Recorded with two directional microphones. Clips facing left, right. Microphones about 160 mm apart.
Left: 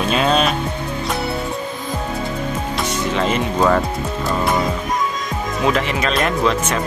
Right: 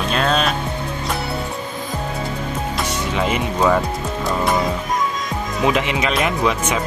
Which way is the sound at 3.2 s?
10° right (ahead or behind).